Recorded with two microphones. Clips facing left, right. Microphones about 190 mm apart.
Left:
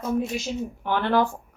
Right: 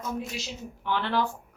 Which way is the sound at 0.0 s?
50° left (ahead or behind).